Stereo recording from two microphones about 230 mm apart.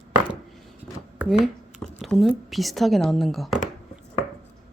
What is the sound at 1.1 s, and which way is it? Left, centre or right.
Speech, centre.